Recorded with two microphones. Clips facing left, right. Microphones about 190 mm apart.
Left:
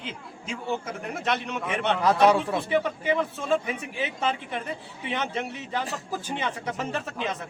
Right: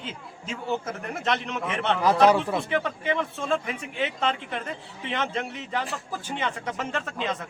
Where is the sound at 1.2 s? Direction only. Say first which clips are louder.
Right 1 dB; centre (ahead or behind).